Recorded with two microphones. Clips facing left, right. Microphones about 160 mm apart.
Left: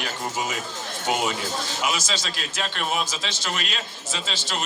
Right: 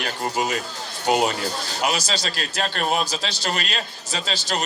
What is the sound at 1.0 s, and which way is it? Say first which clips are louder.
A woman's voice: right 5 dB; 35° right (ahead or behind).